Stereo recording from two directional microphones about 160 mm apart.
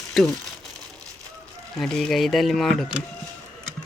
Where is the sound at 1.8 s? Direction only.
Centre (ahead or behind).